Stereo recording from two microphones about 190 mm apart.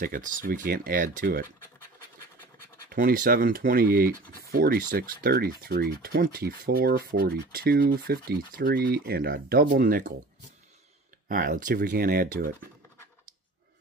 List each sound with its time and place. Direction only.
0.0 s speech: 45° right (ahead or behind)
2.9 s speech: 50° right (ahead or behind)
11.2 s speech: 45° right (ahead or behind)